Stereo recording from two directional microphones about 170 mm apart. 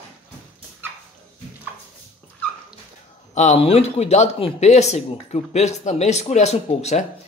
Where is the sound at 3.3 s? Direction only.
40° left (ahead or behind).